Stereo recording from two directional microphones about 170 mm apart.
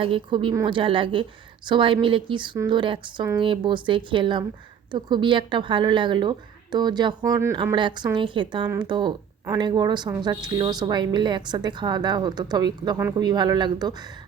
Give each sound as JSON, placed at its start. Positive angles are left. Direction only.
{"t": 0.0, "sound": "speech", "side_deg": -30}